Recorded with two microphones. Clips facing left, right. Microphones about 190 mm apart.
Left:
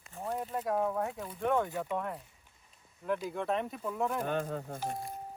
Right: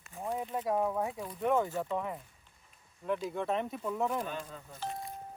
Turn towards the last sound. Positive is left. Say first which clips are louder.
# left 7 dB
turn(degrees=60)  # may be behind; listen again after turning